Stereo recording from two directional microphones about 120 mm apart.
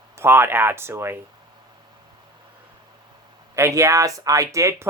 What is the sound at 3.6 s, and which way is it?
Speech, 25° right (ahead or behind).